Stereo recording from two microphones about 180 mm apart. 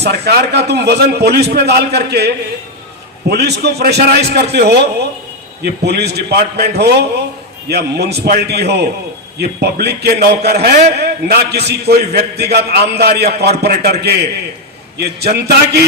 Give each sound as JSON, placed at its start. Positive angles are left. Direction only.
{"t": 0.0, "sound": "a man's voice", "side_deg": -65}